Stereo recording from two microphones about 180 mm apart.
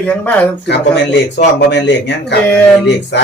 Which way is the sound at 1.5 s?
75° left (ahead or behind).